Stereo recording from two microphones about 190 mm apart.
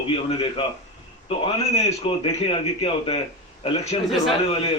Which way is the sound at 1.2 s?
30° left (ahead or behind).